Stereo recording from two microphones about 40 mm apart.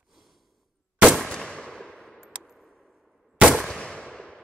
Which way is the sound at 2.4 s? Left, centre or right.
Centre.